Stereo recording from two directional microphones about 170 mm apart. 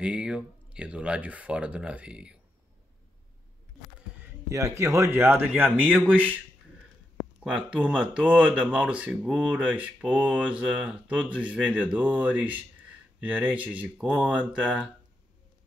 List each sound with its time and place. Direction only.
0.0 s speech: 5° right (ahead or behind)
4.5 s speech: 15° right (ahead or behind)
7.4 s speech: 5° right (ahead or behind)